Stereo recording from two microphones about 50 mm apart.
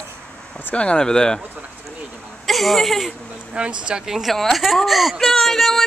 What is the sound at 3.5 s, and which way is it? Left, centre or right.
Speech, centre.